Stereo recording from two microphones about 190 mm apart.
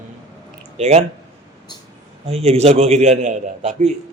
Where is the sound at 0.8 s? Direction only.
35° right (ahead or behind).